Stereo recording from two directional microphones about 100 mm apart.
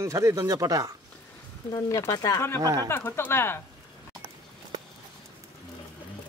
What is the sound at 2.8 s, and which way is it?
Speech, 25° left (ahead or behind).